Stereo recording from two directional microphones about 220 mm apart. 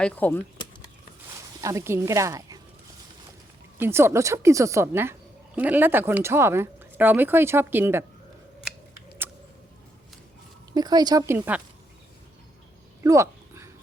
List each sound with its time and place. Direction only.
0.0 s speech: 10° left (ahead or behind)
1.6 s speech: 15° right (ahead or behind)
3.8 s speech: 10° right (ahead or behind)
10.8 s speech: 20° right (ahead or behind)
13.0 s a sound: 15° right (ahead or behind)